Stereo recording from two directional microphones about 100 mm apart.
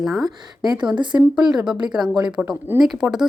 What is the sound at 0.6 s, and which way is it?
Speech, 45° right (ahead or behind).